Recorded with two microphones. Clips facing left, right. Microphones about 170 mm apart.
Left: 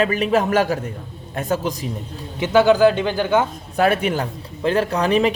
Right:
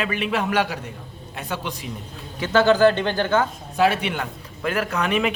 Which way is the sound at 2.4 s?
10° left (ahead or behind).